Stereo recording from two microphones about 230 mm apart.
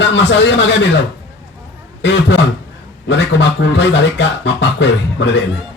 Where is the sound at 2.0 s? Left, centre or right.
Left.